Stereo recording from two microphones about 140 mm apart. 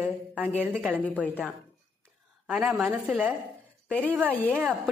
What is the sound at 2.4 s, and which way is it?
Speech, 5° right (ahead or behind).